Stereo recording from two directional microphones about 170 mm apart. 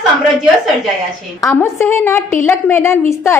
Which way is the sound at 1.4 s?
15° left (ahead or behind).